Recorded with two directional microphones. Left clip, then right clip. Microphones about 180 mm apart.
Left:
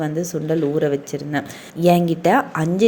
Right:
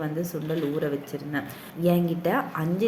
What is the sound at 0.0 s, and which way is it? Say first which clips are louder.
A woman's voice: left 7 dB; 40° left (ahead or behind).